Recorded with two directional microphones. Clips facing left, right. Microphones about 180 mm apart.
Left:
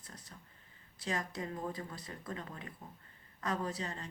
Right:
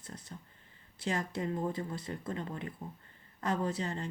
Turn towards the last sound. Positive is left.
turn(degrees=-30)  # may be behind; listen again after turning